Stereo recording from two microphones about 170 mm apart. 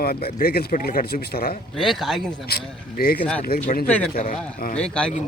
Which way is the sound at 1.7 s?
Centre (ahead or behind).